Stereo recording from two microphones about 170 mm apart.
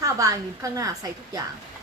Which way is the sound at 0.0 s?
20° right (ahead or behind).